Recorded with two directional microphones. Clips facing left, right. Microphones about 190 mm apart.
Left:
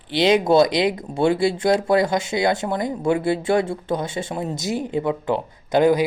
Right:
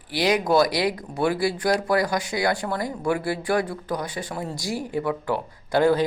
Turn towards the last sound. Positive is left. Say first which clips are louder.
# left 3 dB
turn(degrees=15)  # may be behind; listen again after turning